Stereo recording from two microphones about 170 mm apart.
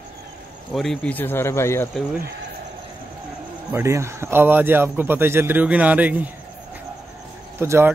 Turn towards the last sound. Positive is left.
turn(degrees=-15)  # may be behind; listen again after turning